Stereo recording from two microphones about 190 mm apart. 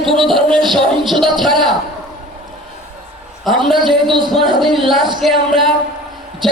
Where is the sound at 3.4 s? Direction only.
Centre (ahead or behind).